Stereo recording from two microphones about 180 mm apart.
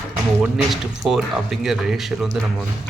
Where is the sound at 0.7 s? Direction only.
Centre (ahead or behind).